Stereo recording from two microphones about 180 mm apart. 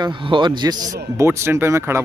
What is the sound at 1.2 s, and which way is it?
Speech, 15° right (ahead or behind).